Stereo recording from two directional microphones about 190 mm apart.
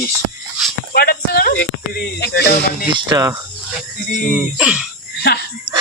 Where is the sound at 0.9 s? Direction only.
55° left (ahead or behind).